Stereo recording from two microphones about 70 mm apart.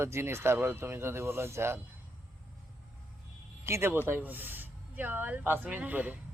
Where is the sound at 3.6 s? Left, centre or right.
Right.